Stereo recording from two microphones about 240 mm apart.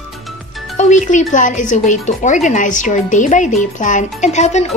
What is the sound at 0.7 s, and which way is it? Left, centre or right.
Speech, left.